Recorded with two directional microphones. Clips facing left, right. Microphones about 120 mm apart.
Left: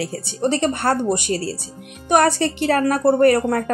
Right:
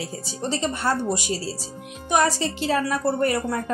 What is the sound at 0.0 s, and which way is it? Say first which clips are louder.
A woman's voice: left 8 dB; 60° left (ahead or behind).